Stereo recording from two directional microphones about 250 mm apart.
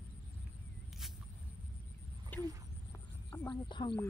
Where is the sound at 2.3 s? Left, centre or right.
Centre.